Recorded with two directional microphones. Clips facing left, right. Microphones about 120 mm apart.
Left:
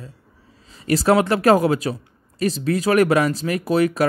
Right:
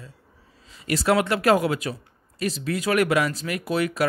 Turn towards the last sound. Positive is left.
turn(degrees=40)  # may be behind; listen again after turning